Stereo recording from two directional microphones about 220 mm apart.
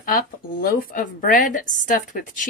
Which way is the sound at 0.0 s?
40° left (ahead or behind).